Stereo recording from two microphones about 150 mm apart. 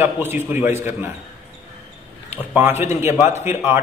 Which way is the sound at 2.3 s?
15° right (ahead or behind).